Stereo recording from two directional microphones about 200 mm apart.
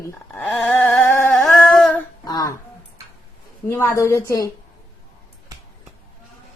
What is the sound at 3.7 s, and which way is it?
Speech, 10° left (ahead or behind).